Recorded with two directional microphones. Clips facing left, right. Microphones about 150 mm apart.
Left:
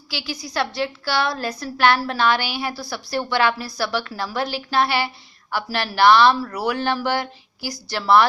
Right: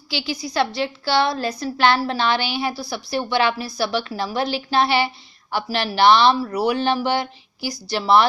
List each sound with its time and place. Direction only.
0.1 s a woman's voice: 20° right (ahead or behind)